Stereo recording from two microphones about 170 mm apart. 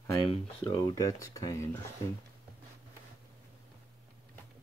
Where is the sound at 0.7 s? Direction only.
20° left (ahead or behind).